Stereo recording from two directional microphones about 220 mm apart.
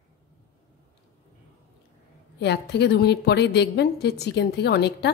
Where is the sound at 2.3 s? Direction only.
50° left (ahead or behind).